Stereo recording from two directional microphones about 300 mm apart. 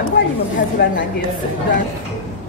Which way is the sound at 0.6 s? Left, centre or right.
Left.